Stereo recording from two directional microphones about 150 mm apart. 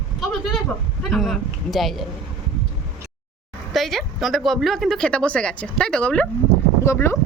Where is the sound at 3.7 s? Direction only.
Centre (ahead or behind).